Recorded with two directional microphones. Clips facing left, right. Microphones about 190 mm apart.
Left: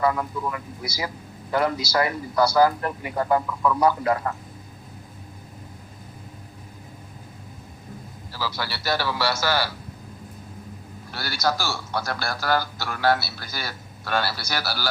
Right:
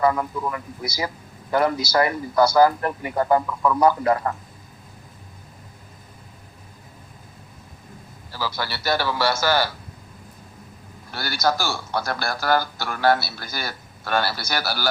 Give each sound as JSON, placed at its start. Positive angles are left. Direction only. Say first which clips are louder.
{"t": 0.5, "sound": "a man's voice", "louder": "right 2 dB", "side_deg": -45}
{"t": 8.4, "sound": "a man's voice", "louder": "right 2 dB", "side_deg": -50}
{"t": 11.1, "sound": "a man's voice", "louder": "right 2 dB", "side_deg": -50}